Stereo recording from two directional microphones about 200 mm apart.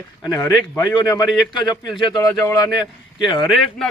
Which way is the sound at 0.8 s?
20° left (ahead or behind).